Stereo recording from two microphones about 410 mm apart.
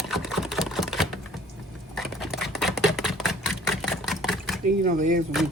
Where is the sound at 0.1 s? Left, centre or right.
Centre.